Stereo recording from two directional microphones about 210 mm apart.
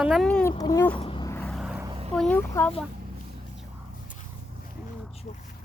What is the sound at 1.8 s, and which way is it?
Vehicle, 25° right (ahead or behind).